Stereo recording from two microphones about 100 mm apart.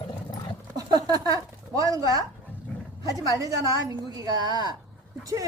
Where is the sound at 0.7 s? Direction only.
40° right (ahead or behind).